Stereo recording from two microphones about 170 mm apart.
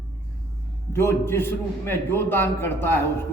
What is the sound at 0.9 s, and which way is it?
A man's voice, 15° left (ahead or behind).